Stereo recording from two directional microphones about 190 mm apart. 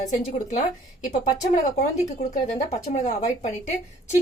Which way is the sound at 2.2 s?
35° left (ahead or behind).